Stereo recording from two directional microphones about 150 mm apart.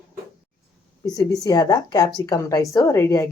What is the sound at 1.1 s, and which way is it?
A woman's voice, 25° left (ahead or behind).